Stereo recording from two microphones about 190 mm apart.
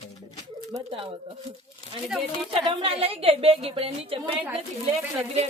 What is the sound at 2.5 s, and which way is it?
A woman's voice, 30° right (ahead or behind).